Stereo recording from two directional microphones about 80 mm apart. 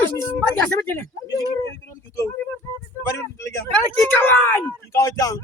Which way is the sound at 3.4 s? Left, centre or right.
Left.